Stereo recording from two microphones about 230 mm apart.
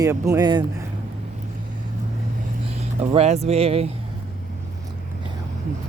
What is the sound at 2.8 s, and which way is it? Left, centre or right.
Speech, right.